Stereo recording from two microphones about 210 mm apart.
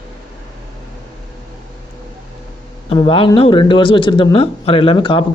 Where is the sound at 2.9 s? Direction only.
25° left (ahead or behind).